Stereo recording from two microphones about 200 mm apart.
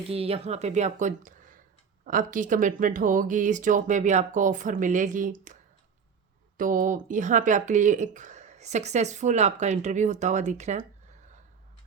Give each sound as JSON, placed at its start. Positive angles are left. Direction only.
{"t": 0.1, "sound": "speech", "side_deg": -30}
{"t": 6.6, "sound": "speech", "side_deg": -40}